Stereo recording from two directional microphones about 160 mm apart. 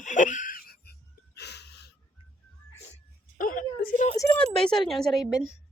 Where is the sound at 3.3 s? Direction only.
60° left (ahead or behind).